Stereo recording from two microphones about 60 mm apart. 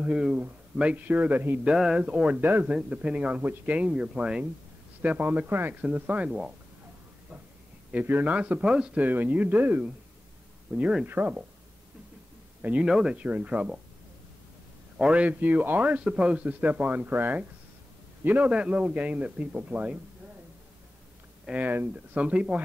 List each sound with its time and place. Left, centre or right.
0.0 s a man's voice: centre
2.0 s a man's voice: right
7.9 s a man's voice: right
8.6 s speech: centre
8.9 s a man's voice: right
10.7 s speech: centre
11.1 s a man's voice: right
12.8 s speech: centre
13.1 s a man's voice: right
15.0 s a man's voice: right
21.5 s a man's voice: right